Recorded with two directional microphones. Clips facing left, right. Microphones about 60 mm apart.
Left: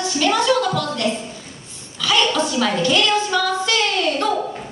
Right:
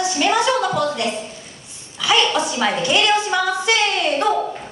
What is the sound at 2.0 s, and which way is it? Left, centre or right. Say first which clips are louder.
A woman's voice: right 1 dB; centre.